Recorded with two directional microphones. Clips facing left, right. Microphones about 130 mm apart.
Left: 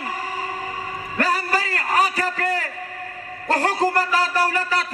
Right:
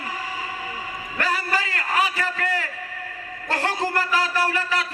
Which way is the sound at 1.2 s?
40° left (ahead or behind).